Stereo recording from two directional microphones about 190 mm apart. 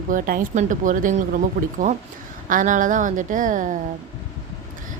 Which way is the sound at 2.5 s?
45° right (ahead or behind).